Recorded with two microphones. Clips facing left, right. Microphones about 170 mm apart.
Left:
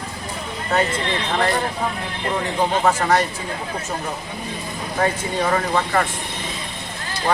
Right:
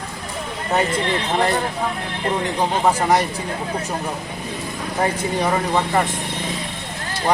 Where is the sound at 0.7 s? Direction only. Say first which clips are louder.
Right 1 dB; 20° right (ahead or behind).